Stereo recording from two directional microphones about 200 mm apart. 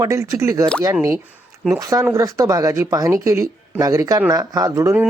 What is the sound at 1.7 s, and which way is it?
Speech, 15° right (ahead or behind).